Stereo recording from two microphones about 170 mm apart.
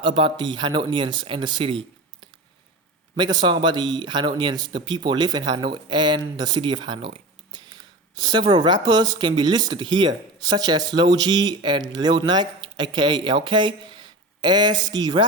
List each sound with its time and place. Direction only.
0.0 s a man's voice: 30° right (ahead or behind)
3.2 s a man's voice: 25° right (ahead or behind)